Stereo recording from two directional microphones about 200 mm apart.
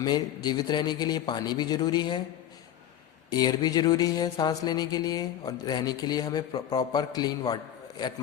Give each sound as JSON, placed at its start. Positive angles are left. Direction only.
{"t": 0.0, "sound": "mantra", "side_deg": 20}
{"t": 3.2, "sound": "mantra", "side_deg": 20}